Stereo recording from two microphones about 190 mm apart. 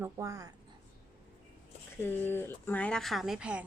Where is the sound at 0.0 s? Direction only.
15° right (ahead or behind).